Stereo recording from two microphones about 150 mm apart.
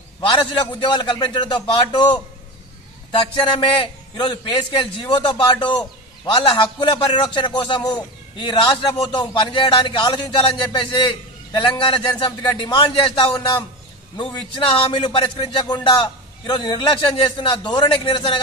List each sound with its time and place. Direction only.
0.2 s a man's voice: 35° left (ahead or behind)